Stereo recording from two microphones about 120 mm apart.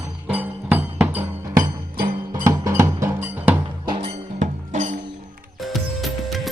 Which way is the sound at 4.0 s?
80° right.